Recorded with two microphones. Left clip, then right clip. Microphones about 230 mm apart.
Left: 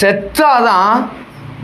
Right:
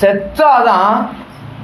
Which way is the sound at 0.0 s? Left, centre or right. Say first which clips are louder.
Right 1 dB; left.